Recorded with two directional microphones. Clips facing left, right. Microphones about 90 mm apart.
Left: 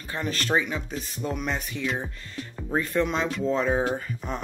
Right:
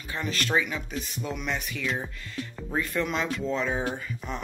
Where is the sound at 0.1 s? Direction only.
35° left (ahead or behind).